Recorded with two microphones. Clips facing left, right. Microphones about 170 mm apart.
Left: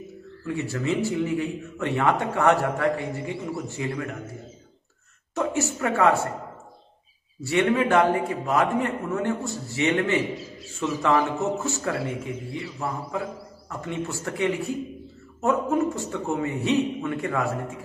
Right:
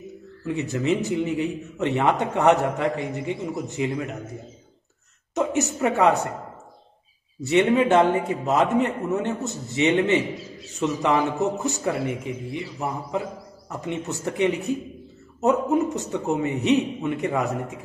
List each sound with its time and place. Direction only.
0.5 s a man's voice: 20° right (ahead or behind)
5.3 s a man's voice: 20° right (ahead or behind)
7.3 s a man's voice: 20° right (ahead or behind)